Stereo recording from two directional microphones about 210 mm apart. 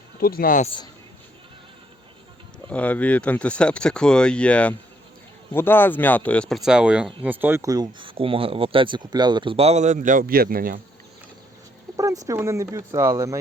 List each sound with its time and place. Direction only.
0.2 s speech: 45° left (ahead or behind)
2.6 s speech: 5° left (ahead or behind); by 10.8 s 45° right (ahead or behind)
11.9 s speech: 15° right (ahead or behind)